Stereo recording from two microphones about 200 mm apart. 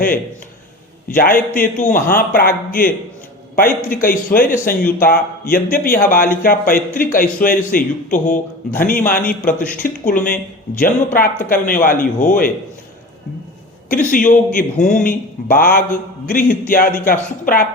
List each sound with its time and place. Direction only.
1.0 s a man's voice: 45° left (ahead or behind)
13.9 s speech: 45° left (ahead or behind)